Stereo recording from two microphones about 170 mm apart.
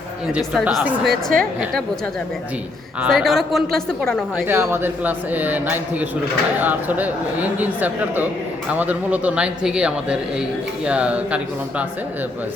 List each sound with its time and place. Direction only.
0.3 s a man's voice: 5° right (ahead or behind)
1.0 s a woman's voice: 65° right (ahead or behind)
3.0 s a man's voice: centre (ahead or behind)
4.4 s a man's voice: 15° right (ahead or behind)